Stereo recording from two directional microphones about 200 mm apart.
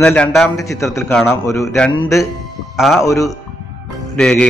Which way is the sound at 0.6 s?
15° left (ahead or behind).